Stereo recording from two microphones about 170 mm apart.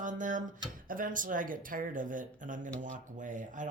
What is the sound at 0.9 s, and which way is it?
Speech, 55° right (ahead or behind).